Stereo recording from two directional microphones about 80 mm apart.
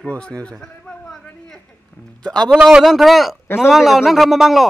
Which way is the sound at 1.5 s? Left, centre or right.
Centre.